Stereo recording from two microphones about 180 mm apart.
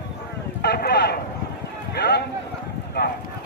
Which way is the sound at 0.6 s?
65° left (ahead or behind).